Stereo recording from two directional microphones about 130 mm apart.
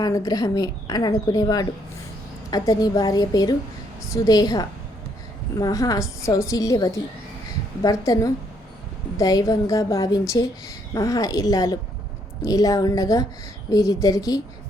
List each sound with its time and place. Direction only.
0.0 s a woman's voice: 30° left (ahead or behind)